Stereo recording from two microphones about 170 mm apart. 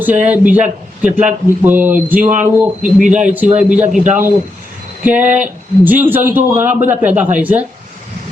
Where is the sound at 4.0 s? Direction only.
45° right (ahead or behind).